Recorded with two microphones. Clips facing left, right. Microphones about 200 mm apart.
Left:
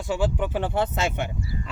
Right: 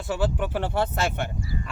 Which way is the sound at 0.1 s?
15° left (ahead or behind).